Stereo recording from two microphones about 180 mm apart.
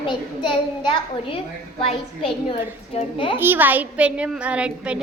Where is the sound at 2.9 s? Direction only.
30° left (ahead or behind).